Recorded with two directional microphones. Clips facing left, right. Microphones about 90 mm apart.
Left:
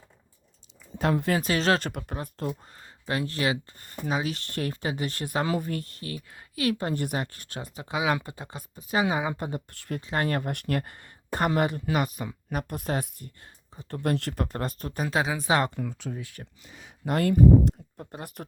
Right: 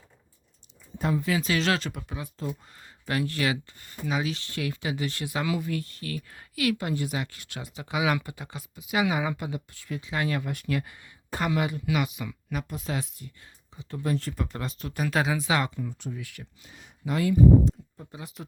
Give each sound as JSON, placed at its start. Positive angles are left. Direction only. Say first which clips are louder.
{"t": 0.9, "sound": "speech", "louder": "left 2 dB", "side_deg": 85}
{"t": 1.2, "sound": "speech", "louder": "left 1 dB", "side_deg": 50}
{"t": 1.9, "sound": "speech", "louder": "left 2 dB", "side_deg": 50}
{"t": 3.1, "sound": "speech", "louder": "even", "side_deg": 30}
{"t": 6.1, "sound": "speech", "louder": "right 2 dB", "side_deg": 25}
{"t": 6.9, "sound": "speech", "louder": "left 1 dB", "side_deg": 50}
{"t": 9.7, "sound": "speech", "louder": "left 2 dB", "side_deg": 60}
{"t": 10.0, "sound": "speech", "louder": "left 2 dB", "side_deg": 45}
{"t": 14.4, "sound": "speech", "louder": "left 3 dB", "side_deg": 45}
{"t": 15.1, "sound": "speech", "louder": "right 1 dB", "side_deg": 20}
{"t": 15.4, "sound": "speech", "louder": "left 2 dB", "side_deg": 40}
{"t": 15.7, "sound": "speech", "louder": "left 2 dB", "side_deg": 65}
{"t": 16.1, "sound": "speech", "louder": "left 1 dB", "side_deg": 35}
{"t": 17.1, "sound": "speech", "louder": "left 1 dB", "side_deg": 55}